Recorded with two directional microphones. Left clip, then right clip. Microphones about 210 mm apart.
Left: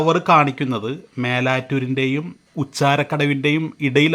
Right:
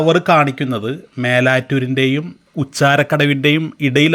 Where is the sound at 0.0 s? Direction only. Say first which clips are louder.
Right 2 dB; 10° right (ahead or behind).